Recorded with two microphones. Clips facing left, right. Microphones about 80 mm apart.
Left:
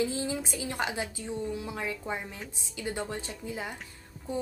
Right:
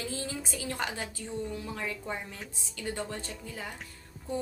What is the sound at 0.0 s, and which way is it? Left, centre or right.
A woman's voice, centre.